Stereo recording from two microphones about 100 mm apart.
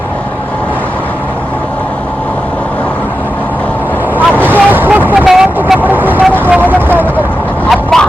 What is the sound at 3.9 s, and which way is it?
Vehicle, 20° right (ahead or behind).